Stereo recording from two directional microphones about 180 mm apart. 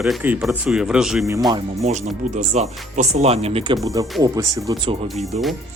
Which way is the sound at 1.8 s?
40° right (ahead or behind).